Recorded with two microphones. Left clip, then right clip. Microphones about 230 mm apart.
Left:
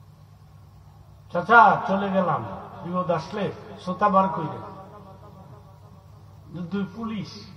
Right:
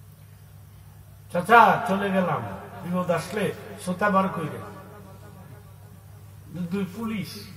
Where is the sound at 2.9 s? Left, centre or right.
Right.